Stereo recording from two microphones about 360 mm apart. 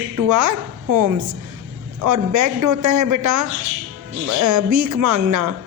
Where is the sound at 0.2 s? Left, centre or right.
Right.